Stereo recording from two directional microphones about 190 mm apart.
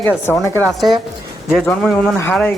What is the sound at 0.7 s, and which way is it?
Speech, centre (ahead or behind).